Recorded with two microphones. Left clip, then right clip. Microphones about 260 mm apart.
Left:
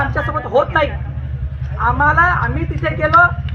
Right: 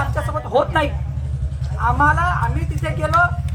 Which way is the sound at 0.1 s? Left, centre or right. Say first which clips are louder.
Left 3 dB; right.